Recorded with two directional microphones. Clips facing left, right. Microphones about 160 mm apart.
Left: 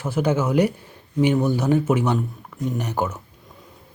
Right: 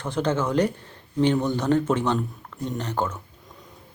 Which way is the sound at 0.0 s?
10° left (ahead or behind).